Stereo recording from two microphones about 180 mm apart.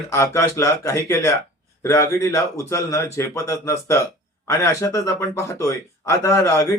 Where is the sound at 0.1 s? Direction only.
15° left (ahead or behind).